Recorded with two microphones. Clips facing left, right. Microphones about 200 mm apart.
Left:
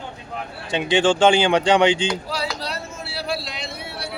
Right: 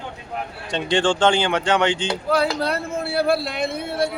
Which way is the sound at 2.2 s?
55° right (ahead or behind).